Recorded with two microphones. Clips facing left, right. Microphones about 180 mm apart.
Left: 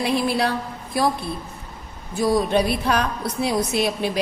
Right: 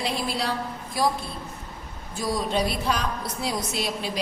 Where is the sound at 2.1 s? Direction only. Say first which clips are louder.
Left 7 dB; 65° left (ahead or behind).